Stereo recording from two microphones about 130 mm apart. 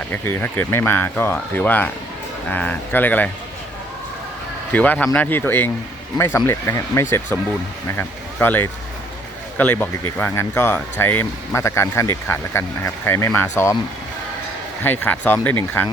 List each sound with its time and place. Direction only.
0.1 s speech: 15° left (ahead or behind)
4.7 s speech: 10° left (ahead or behind)
14.8 s speech: 15° left (ahead or behind)